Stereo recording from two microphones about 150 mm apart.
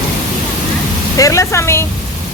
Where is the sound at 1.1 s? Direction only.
20° left (ahead or behind).